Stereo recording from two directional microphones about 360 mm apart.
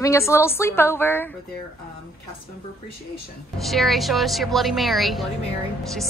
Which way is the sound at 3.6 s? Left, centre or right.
Centre.